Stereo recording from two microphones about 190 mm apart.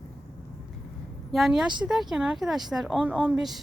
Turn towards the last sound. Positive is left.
turn(degrees=-5)  # may be behind; listen again after turning